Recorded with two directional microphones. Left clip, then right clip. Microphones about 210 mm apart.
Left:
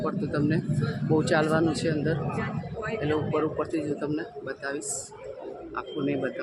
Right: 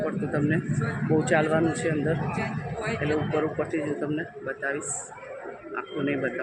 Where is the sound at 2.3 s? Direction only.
55° right (ahead or behind).